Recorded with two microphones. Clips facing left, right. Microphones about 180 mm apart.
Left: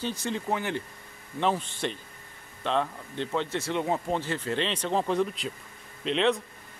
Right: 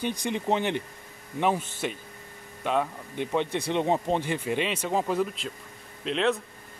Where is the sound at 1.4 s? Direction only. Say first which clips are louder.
Right 1 dB; 10° right (ahead or behind).